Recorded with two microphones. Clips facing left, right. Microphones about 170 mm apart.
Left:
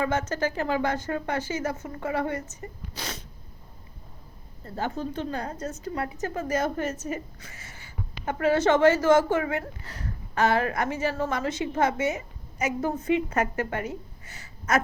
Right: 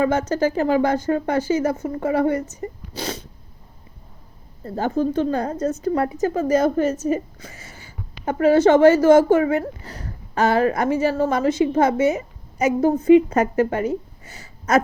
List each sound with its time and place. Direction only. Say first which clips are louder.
0.0 s speech: right 7 dB; 35° right (ahead or behind)
4.8 s a woman's voice: right 10 dB; 45° right (ahead or behind)